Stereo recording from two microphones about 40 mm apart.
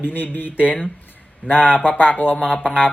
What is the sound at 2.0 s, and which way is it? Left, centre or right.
Speech, left.